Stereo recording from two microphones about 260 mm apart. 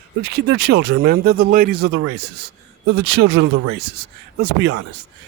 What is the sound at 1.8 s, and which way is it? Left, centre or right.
Speech, right.